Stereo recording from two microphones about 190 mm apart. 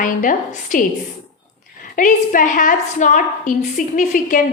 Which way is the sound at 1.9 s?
45° left (ahead or behind).